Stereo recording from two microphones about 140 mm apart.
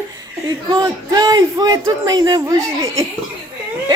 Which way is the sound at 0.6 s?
25° right (ahead or behind).